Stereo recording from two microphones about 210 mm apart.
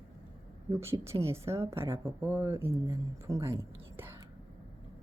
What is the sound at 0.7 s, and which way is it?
Speech, 10° right (ahead or behind).